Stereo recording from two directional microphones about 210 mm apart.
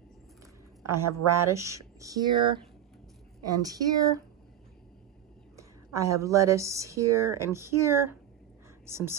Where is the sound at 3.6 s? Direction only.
15° right (ahead or behind).